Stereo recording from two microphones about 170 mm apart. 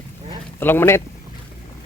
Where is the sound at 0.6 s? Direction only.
15° left (ahead or behind).